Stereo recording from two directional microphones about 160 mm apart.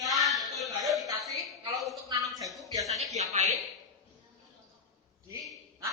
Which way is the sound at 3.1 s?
45° right (ahead or behind).